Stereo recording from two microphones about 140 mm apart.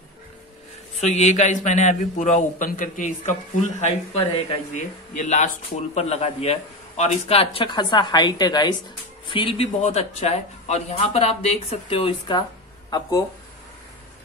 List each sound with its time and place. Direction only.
1.0 s a man's voice: 55° left (ahead or behind)
3.8 s speech: 50° left (ahead or behind)
9.8 s speech: 55° left (ahead or behind); by 12.4 s 35° left (ahead or behind)